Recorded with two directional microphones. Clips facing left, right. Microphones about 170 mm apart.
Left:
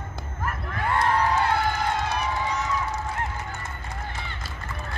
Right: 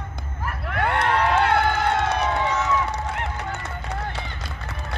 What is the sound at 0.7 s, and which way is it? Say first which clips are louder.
Crowd: right 2 dB; 70° right (ahead or behind).